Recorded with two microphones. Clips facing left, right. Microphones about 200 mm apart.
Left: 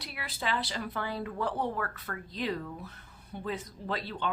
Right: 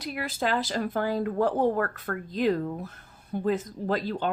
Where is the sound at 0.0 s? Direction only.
45° right (ahead or behind).